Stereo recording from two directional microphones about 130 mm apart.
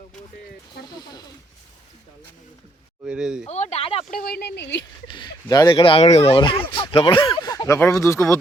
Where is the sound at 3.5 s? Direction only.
60° left (ahead or behind).